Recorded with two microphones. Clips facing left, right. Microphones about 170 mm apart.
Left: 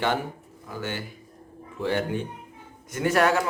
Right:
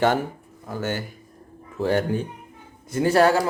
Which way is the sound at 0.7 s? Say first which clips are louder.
Right 5 dB; 45° right (ahead or behind).